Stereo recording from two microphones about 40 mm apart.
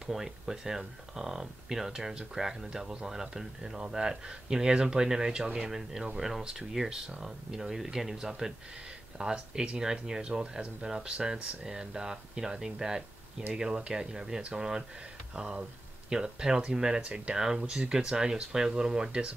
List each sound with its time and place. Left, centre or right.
0.1 s speech: centre